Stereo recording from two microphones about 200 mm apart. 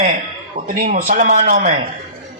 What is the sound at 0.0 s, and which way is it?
A man's voice, 45° right (ahead or behind).